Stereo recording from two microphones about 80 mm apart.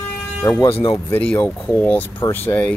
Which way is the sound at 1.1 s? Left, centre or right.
Centre.